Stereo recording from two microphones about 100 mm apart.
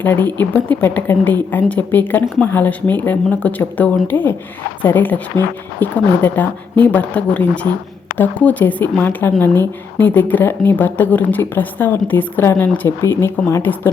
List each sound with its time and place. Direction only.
0.0 s a woman's voice: 20° left (ahead or behind)